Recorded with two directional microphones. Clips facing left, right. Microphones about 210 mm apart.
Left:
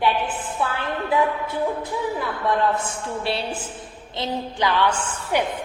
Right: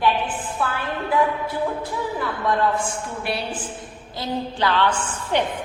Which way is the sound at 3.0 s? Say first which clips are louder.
Left 2 dB; 25° left (ahead or behind).